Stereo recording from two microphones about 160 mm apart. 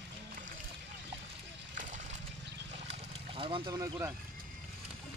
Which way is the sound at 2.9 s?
35° right (ahead or behind).